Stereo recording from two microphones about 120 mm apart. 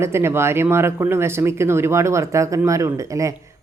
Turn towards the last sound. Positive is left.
turn(degrees=-25)  # may be behind; listen again after turning